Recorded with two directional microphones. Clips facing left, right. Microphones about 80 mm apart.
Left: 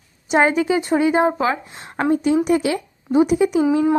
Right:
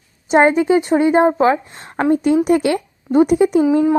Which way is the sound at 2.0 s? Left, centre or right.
Right.